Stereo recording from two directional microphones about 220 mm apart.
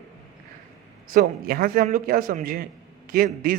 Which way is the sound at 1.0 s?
40° right (ahead or behind).